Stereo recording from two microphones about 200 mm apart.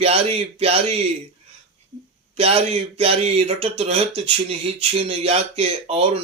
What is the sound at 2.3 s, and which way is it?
Speech, 30° right (ahead or behind).